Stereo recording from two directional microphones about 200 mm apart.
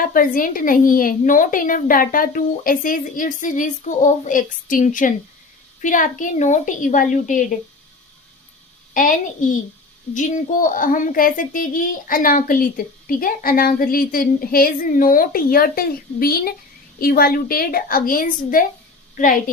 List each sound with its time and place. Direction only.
0.0 s a woman's voice: 45° left (ahead or behind)
8.9 s a woman's voice: 45° left (ahead or behind)